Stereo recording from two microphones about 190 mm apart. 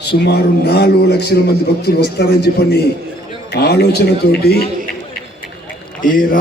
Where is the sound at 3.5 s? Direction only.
60° left (ahead or behind).